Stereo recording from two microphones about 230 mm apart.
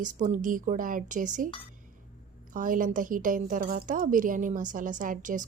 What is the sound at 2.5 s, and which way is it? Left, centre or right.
A woman's voice, right.